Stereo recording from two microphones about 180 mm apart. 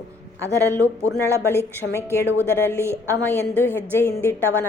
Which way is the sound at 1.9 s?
15° left (ahead or behind).